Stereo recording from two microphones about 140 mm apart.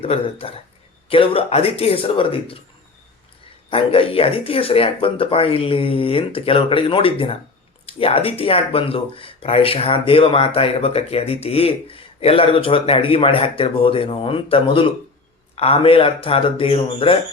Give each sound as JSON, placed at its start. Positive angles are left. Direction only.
{"t": 0.0, "sound": "speech", "side_deg": 45}
{"t": 3.7, "sound": "speech", "side_deg": 40}